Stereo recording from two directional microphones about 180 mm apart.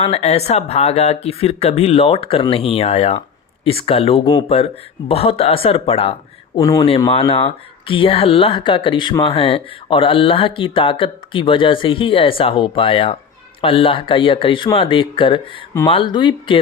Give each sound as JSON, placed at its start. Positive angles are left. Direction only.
{"t": 0.0, "sound": "speech", "side_deg": 35}
{"t": 6.6, "sound": "speech", "side_deg": 20}
{"t": 7.1, "sound": "speech", "side_deg": 30}